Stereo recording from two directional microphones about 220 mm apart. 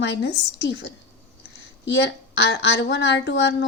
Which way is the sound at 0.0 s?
55° left (ahead or behind).